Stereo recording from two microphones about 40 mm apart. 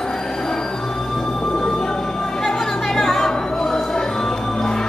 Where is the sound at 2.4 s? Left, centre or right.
Centre.